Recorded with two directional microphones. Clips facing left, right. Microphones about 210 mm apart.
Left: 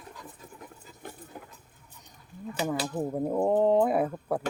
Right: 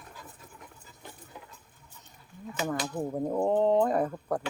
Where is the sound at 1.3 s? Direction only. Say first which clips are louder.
Left 3 dB; 50° left (ahead or behind).